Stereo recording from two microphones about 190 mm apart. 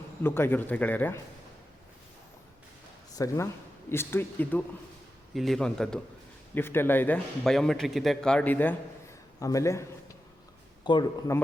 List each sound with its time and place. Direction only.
0.2 s a man's voice: 10° left (ahead or behind)
3.2 s a man's voice: 15° left (ahead or behind)
5.3 s a man's voice: centre (ahead or behind); by 9.8 s 15° left (ahead or behind)
10.8 s speech: 25° left (ahead or behind)